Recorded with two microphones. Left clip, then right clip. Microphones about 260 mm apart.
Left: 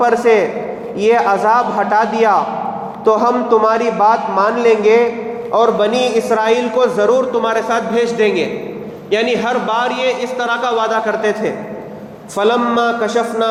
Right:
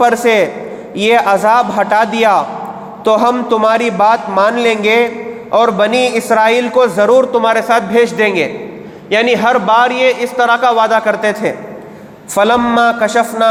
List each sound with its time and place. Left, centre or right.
0.0 s a man's voice: right